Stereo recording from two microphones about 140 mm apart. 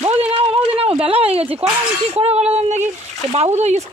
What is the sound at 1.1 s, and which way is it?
Speech, 45° right (ahead or behind).